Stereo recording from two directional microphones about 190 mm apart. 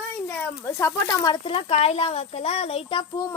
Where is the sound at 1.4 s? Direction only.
30° left (ahead or behind).